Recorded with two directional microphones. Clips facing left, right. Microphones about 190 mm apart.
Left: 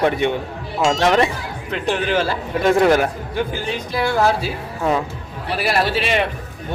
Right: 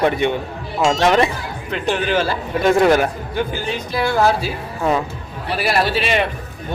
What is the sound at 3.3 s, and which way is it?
A man's voice, centre (ahead or behind).